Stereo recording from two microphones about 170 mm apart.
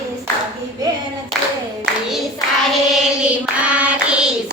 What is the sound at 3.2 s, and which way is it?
Hands, 5° right (ahead or behind).